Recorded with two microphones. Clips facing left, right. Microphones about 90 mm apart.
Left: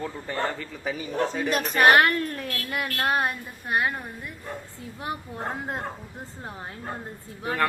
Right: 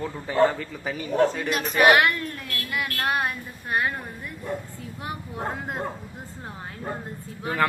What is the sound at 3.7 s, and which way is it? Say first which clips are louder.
Speech: even; 20° left (ahead or behind).